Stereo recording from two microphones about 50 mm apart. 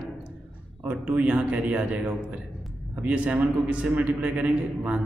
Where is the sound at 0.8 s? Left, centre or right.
Right.